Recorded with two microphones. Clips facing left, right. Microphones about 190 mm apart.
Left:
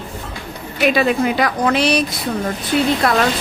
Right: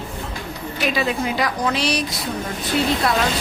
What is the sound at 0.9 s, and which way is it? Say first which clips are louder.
A woman's voice: left 4 dB; 60° left (ahead or behind).